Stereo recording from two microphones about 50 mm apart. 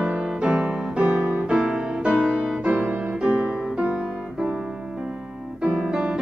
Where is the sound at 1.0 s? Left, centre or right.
Right.